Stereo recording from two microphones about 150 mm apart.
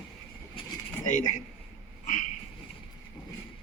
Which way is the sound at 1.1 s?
55° left (ahead or behind).